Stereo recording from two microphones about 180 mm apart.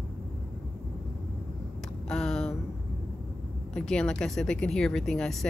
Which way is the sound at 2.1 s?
5° left (ahead or behind).